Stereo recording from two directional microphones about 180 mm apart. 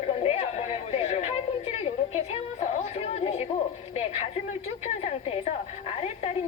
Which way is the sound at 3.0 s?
35° left (ahead or behind).